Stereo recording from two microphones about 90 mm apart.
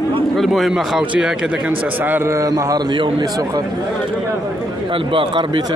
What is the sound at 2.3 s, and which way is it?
Speech, 35° right (ahead or behind).